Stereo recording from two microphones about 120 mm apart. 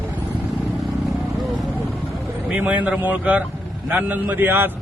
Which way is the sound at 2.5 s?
15° right (ahead or behind).